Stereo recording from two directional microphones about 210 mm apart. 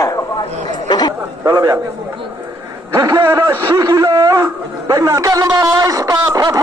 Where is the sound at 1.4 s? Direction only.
15° right (ahead or behind).